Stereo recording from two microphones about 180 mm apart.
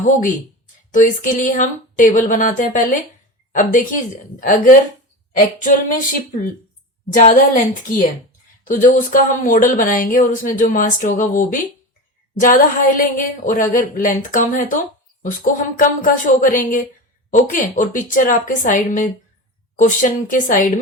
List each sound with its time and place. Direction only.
0.0 s speech: 45° left (ahead or behind)